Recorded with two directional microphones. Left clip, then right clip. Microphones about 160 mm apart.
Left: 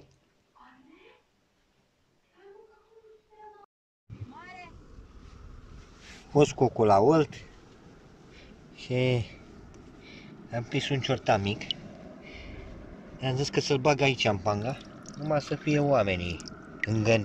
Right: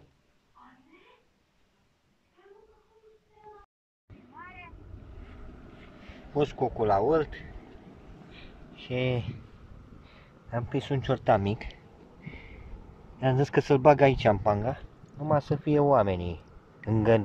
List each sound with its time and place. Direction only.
4.4 s vehicle: 25° left (ahead or behind)
6.3 s speech: 10° left (ahead or behind)
8.7 s speech: 5° left (ahead or behind)
10.0 s a sound: 5° left (ahead or behind)
10.8 s speech: 5° left (ahead or behind)
13.2 s speech: 5° right (ahead or behind)